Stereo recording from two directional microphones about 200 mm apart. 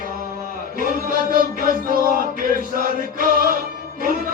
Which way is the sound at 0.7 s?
45° right (ahead or behind).